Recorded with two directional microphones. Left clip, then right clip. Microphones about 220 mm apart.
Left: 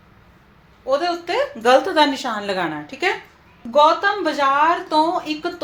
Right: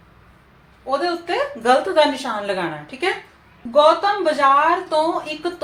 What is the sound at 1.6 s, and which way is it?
A woman's voice, 45° left (ahead or behind).